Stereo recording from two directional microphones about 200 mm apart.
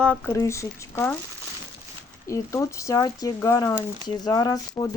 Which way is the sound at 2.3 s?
15° left (ahead or behind).